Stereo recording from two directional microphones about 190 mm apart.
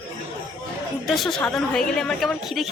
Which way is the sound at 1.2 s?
5° left (ahead or behind).